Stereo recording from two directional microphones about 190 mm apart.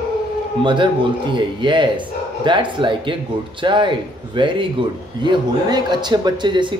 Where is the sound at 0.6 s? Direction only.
25° right (ahead or behind).